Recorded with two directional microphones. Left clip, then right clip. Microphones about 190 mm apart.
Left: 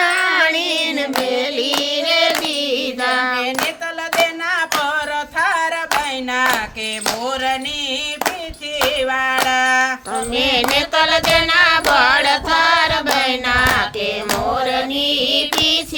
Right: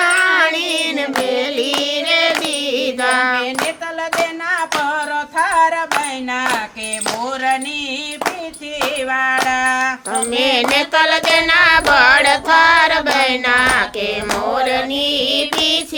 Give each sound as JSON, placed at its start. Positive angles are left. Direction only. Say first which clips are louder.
{"t": 0.0, "sound": "carnatic music", "louder": "right 2 dB", "side_deg": 0}
{"t": 2.6, "sound": "child singing", "louder": "right 2 dB", "side_deg": -10}
{"t": 4.4, "sound": "music", "louder": "even", "side_deg": 40}
{"t": 9.0, "sound": "a sound", "louder": "right 1 dB", "side_deg": 40}
{"t": 10.3, "sound": "carnatic music", "louder": "right 1 dB", "side_deg": -15}
{"t": 14.5, "sound": "music", "louder": "right 2 dB", "side_deg": -15}